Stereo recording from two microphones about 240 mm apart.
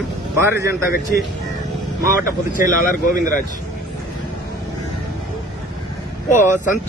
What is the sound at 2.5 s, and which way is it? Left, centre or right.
Speech, left.